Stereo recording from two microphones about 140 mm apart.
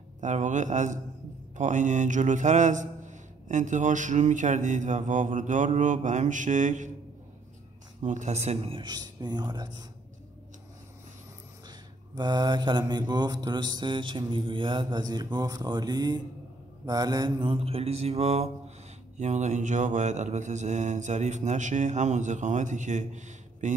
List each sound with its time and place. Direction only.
0.2 s a man's voice: 60° right (ahead or behind)
8.0 s mantra: 60° right (ahead or behind); by 9.8 s 30° right (ahead or behind)
12.2 s mantra: 30° right (ahead or behind); by 18.5 s 50° right (ahead or behind)
19.1 s a man's voice: 55° right (ahead or behind)